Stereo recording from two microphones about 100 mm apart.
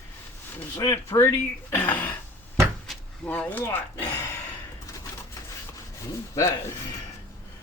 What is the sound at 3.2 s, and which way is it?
Speech, 15° left (ahead or behind).